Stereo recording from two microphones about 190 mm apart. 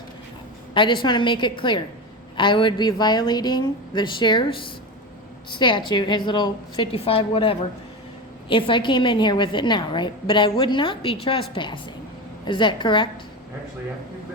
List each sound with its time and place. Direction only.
0.7 s a woman's voice: 25° left (ahead or behind)